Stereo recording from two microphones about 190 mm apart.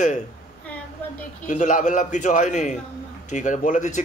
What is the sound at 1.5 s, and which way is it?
Speech, 40° left (ahead or behind).